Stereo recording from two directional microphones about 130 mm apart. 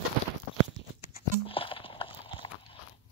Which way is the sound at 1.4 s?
45° left (ahead or behind).